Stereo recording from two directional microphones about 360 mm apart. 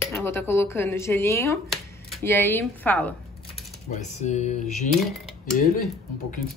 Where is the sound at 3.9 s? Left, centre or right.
Centre.